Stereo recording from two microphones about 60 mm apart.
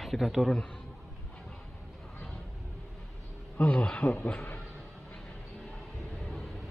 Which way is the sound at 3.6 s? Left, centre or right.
Left.